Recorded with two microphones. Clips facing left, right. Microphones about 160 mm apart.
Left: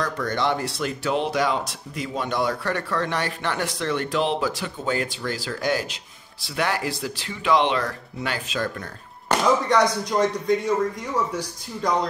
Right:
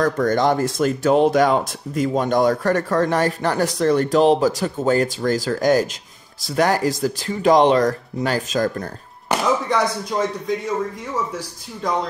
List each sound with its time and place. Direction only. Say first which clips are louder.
0.0 s speech: right 7 dB; 45° right (ahead or behind)
9.3 s speech: even; 5° right (ahead or behind)